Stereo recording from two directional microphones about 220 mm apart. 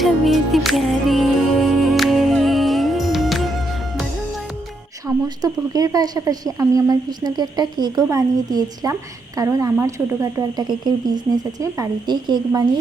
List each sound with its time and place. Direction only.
0.0 s music: centre (ahead or behind)
5.0 s speech: 15° right (ahead or behind)